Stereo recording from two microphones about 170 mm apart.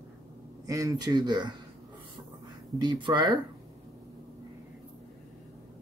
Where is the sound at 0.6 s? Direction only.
20° right (ahead or behind).